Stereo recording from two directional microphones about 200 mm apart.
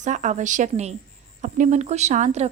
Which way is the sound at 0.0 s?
35° right (ahead or behind).